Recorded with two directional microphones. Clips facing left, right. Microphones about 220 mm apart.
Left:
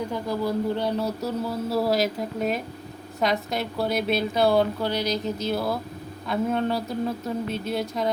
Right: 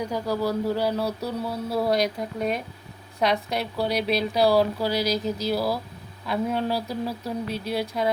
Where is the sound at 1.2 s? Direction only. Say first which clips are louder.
Left 2 dB; centre (ahead or behind).